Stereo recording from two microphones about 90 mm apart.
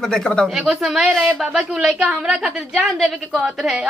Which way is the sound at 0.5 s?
5° right (ahead or behind).